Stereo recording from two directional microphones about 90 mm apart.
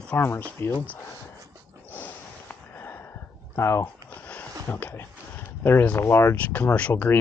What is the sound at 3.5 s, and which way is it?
Speech, 30° left (ahead or behind).